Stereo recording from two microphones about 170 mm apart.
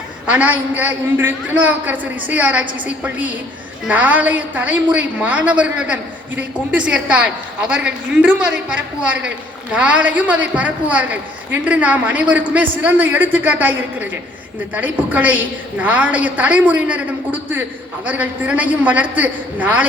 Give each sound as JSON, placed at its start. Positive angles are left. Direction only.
{"t": 0.3, "sound": "a woman's voice", "side_deg": -10}